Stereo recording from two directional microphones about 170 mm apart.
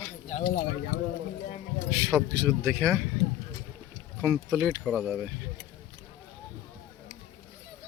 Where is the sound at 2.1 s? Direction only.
Centre (ahead or behind).